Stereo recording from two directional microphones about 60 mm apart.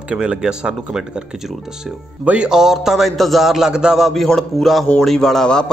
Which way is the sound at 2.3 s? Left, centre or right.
Centre.